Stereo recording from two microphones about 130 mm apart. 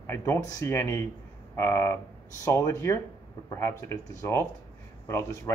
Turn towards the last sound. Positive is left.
turn(degrees=20)  # may be behind; listen again after turning